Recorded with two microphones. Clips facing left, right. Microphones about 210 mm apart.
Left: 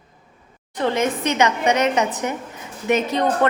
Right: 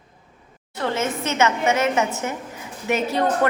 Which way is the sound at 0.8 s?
15° left (ahead or behind).